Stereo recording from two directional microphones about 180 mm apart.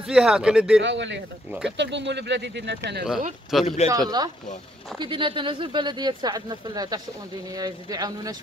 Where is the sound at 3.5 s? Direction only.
Centre (ahead or behind).